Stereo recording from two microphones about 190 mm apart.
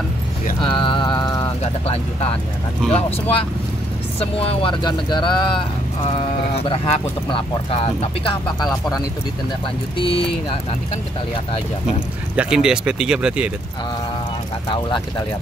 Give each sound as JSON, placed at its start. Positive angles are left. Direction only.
{"t": 0.6, "sound": "mantra", "side_deg": 25}
{"t": 1.6, "sound": "speech", "side_deg": 30}
{"t": 6.7, "sound": "speech", "side_deg": 30}
{"t": 9.9, "sound": "speech", "side_deg": 30}
{"t": 12.4, "sound": "speech", "side_deg": -5}
{"t": 14.7, "sound": "speech", "side_deg": 25}